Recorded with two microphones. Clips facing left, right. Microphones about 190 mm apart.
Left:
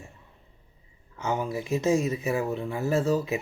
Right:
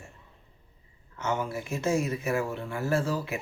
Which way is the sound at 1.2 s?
15° left (ahead or behind).